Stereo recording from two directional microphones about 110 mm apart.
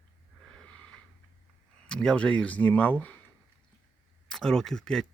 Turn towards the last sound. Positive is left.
turn(degrees=5)  # may be behind; listen again after turning